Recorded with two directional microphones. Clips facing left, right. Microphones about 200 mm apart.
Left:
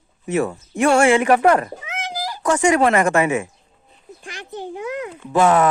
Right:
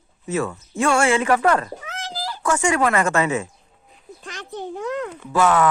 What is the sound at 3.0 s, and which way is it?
Speech, 15° left (ahead or behind).